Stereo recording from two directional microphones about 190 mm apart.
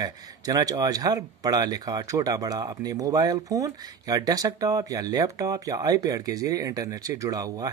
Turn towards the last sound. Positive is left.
turn(degrees=-20)  # may be behind; listen again after turning